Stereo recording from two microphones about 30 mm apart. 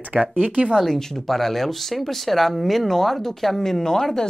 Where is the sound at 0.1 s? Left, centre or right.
Right.